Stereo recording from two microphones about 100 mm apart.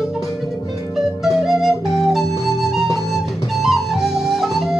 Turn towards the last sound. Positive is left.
turn(degrees=-5)  # may be behind; listen again after turning